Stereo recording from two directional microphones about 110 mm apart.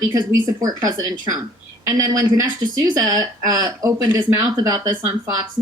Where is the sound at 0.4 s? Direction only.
35° right (ahead or behind).